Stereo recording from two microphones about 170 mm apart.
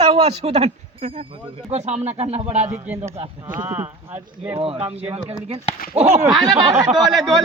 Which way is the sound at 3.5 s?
10° right (ahead or behind).